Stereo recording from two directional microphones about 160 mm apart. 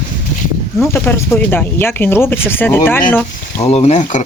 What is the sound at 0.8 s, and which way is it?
Speech, 15° left (ahead or behind).